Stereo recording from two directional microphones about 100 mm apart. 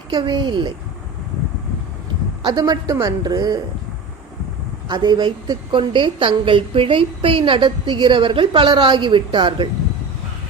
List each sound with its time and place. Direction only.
0.1 s a woman's voice: 50° right (ahead or behind)
2.4 s a woman's voice: 40° right (ahead or behind)
4.9 s a woman's voice: 45° right (ahead or behind)